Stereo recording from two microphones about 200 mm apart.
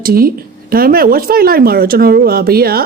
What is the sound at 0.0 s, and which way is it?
A woman's voice, 45° right (ahead or behind).